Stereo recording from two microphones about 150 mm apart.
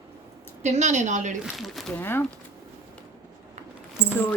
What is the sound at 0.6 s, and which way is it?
Speech, 50° right (ahead or behind).